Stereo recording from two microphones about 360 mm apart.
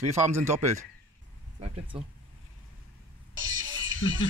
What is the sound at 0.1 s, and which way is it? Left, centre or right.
Speech, centre.